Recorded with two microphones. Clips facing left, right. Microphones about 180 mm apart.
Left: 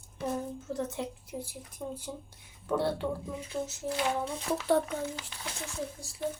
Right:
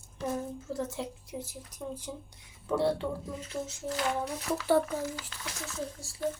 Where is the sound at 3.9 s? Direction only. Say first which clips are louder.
Even; 25° left (ahead or behind).